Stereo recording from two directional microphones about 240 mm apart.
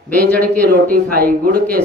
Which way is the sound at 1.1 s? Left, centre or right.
Right.